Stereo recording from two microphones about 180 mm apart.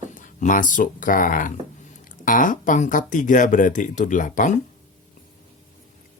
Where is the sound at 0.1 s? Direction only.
45° left (ahead or behind).